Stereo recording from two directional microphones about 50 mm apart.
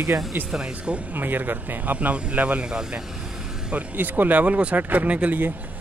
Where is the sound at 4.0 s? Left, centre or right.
Right.